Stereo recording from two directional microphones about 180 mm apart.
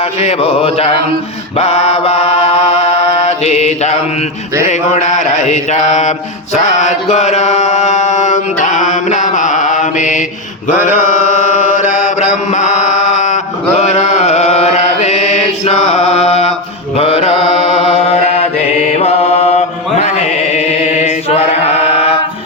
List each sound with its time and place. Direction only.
0.0 s mantra: 35° left (ahead or behind)
20.0 s chant: 40° left (ahead or behind)